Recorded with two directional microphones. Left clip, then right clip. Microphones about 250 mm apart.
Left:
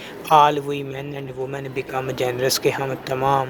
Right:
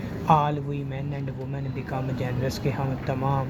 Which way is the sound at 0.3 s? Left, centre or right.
Left.